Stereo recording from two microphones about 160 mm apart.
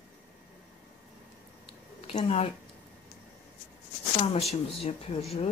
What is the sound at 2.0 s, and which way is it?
Speech, 40° left (ahead or behind).